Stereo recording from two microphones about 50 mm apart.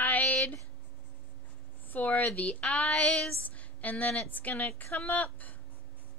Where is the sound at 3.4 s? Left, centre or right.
Left.